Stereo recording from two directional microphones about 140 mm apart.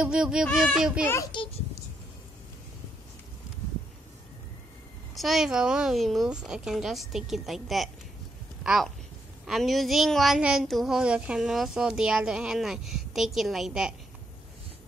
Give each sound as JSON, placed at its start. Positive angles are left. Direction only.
{"t": 0.0, "sound": "speech", "side_deg": -5}
{"t": 1.0, "sound": "a child's voice", "side_deg": 20}
{"t": 5.1, "sound": "speech", "side_deg": 0}